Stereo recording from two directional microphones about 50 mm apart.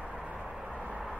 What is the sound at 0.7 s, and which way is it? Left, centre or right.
Vehicle, right.